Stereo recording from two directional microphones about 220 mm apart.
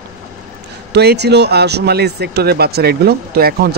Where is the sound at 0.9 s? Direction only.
50° right (ahead or behind).